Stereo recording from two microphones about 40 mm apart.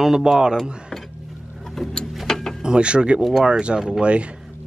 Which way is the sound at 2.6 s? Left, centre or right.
Right.